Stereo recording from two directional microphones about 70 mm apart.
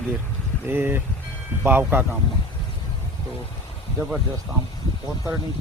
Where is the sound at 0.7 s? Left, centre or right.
Right.